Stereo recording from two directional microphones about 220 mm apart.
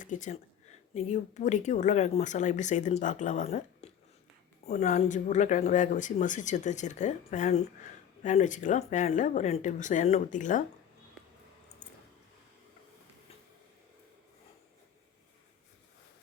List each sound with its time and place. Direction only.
0.0 s a woman's voice: 35° left (ahead or behind)